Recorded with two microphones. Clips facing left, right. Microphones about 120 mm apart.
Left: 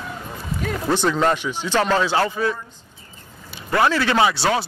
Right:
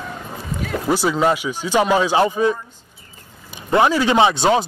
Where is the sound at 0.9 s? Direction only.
10° right (ahead or behind).